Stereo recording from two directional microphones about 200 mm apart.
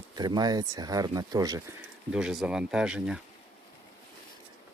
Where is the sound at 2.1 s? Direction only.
5° right (ahead or behind).